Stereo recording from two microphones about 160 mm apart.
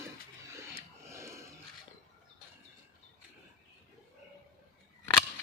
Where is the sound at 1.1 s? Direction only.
15° right (ahead or behind).